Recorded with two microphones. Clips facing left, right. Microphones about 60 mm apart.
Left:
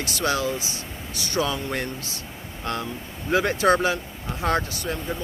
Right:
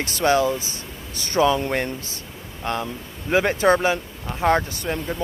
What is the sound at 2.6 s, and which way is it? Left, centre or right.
Speech, centre.